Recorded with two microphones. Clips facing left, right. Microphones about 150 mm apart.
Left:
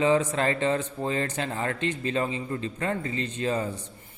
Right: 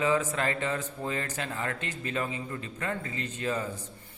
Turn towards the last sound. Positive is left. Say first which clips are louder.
# left 4 dB
turn(degrees=30)  # may be behind; listen again after turning